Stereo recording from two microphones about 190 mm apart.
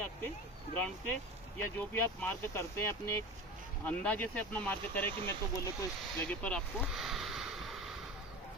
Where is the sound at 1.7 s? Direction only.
10° left (ahead or behind).